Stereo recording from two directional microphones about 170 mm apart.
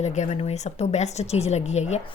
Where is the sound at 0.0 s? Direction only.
45° left (ahead or behind).